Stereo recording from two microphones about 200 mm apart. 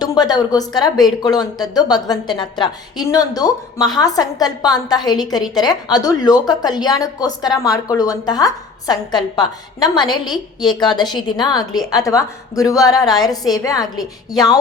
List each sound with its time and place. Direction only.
0.0 s a woman's voice: 20° left (ahead or behind)